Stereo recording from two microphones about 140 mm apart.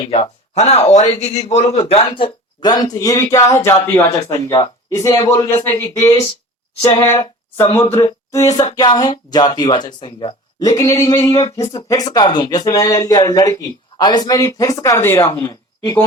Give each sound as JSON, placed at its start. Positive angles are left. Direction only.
{"t": 0.1, "sound": "a man's voice", "side_deg": 50}
{"t": 1.9, "sound": "speech", "side_deg": 40}